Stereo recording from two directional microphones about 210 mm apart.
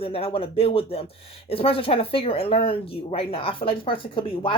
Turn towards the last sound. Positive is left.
turn(degrees=25)  # may be behind; listen again after turning